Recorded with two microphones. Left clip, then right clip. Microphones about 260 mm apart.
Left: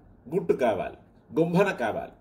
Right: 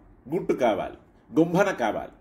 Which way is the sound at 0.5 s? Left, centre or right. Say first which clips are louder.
Right 1 dB; right.